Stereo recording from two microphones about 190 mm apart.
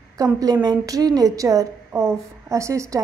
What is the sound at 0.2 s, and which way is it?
A woman's voice, 20° right (ahead or behind).